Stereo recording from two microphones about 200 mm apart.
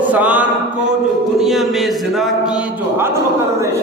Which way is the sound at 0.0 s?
10° right (ahead or behind).